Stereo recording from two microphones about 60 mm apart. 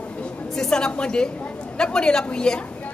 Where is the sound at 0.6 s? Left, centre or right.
Centre.